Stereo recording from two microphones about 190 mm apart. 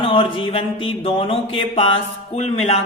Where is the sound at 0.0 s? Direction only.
25° left (ahead or behind).